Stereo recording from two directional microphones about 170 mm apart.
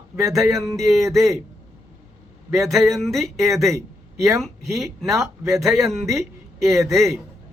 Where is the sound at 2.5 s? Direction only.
Centre (ahead or behind).